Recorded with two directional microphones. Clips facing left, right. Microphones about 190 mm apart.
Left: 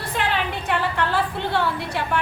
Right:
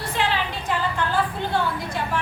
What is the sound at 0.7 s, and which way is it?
Speech, 65° left (ahead or behind).